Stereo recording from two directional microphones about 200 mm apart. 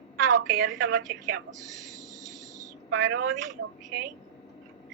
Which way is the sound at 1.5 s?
15° right (ahead or behind).